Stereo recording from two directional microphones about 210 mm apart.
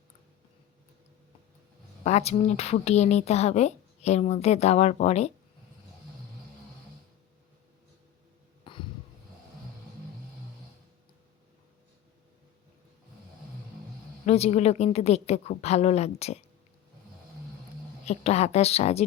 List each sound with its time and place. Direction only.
2.0 s a woman's voice: 35° left (ahead or behind)
8.6 s a sound: 25° left (ahead or behind)
14.3 s a woman's voice: 30° left (ahead or behind)
18.0 s a woman's voice: 30° left (ahead or behind)